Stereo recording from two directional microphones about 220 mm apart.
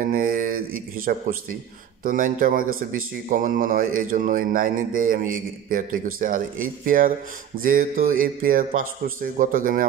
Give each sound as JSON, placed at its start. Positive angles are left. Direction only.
{"t": 0.0, "sound": "mantra", "side_deg": -40}
{"t": 2.0, "sound": "speech", "side_deg": -40}